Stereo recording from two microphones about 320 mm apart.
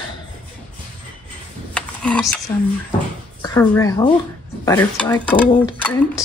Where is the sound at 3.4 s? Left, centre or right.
Centre.